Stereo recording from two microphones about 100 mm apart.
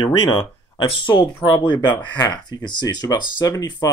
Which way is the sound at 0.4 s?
55° left (ahead or behind).